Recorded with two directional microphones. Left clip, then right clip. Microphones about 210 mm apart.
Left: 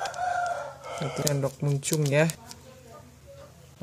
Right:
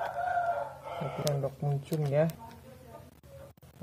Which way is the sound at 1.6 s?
40° left (ahead or behind).